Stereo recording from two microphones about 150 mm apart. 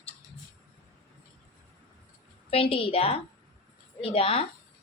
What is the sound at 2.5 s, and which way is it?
A woman's voice, 40° left (ahead or behind).